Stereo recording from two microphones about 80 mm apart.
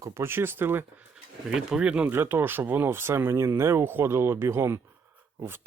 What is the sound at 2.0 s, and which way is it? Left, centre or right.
Speech, right.